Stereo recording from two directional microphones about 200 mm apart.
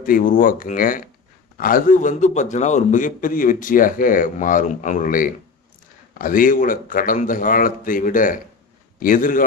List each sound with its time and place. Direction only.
0.0 s a man's voice: 45° left (ahead or behind)